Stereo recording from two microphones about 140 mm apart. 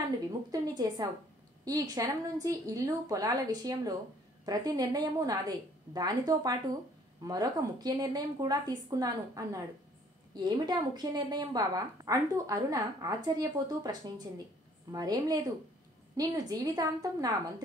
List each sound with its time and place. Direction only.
0.5 s a woman's voice: 25° right (ahead or behind)